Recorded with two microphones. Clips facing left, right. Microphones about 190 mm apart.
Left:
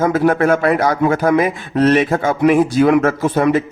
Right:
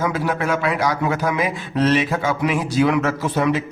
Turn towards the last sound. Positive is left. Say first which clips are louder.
# left 5 dB
turn(degrees=50)  # may be behind; listen again after turning